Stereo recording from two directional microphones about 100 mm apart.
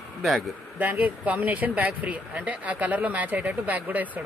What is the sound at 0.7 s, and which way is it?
Speech, 15° right (ahead or behind).